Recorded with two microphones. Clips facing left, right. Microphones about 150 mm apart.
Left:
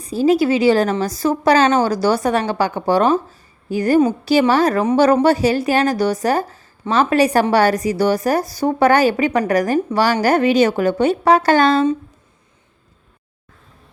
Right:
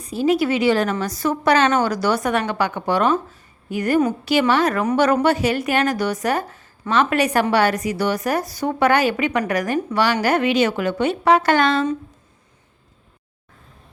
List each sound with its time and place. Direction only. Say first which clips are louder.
0.0 s a woman's voice: left 4 dB; 35° left (ahead or behind)